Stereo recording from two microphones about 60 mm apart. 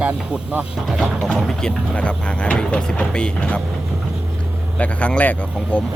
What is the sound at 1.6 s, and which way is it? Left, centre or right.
Speech, centre.